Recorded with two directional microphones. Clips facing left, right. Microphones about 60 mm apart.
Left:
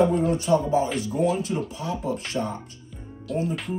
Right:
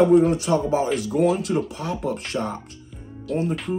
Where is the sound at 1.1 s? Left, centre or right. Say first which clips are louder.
Right 4 dB; right.